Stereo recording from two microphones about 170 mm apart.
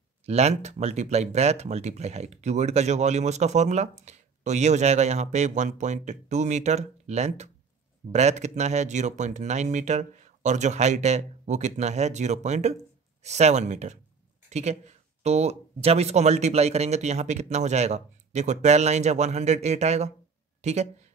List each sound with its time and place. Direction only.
0.2 s speech: 40° right (ahead or behind)